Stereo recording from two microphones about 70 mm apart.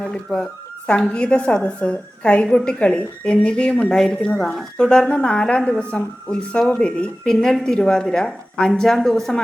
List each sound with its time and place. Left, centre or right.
0.3 s speech: centre
0.9 s a woman's voice: centre